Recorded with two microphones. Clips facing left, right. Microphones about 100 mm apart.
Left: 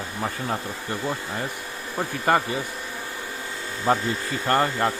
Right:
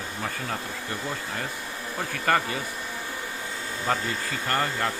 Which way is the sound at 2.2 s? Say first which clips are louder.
Left 3 dB; 20° left (ahead or behind).